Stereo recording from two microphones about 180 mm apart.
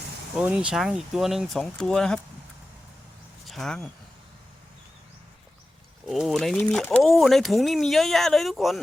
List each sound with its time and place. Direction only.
0.3 s speech: 5° right (ahead or behind)
3.4 s speech: centre (ahead or behind)
6.1 s speech: centre (ahead or behind)